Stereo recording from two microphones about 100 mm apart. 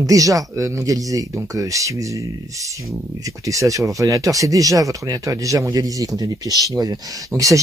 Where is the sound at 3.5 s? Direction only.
35° right (ahead or behind).